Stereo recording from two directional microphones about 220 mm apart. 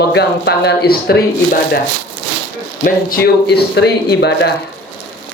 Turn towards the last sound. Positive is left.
turn(degrees=50)  # may be behind; listen again after turning